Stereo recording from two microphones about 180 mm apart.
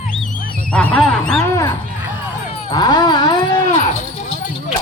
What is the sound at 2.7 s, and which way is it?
Speech, 20° left (ahead or behind).